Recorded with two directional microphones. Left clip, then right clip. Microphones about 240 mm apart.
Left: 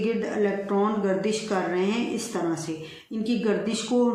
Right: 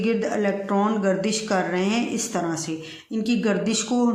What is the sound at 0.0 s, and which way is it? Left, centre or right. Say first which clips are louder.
Speech: right 2 dB; right.